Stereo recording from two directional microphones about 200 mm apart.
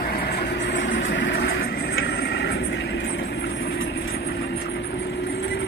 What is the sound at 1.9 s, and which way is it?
Vehicle, 60° left (ahead or behind).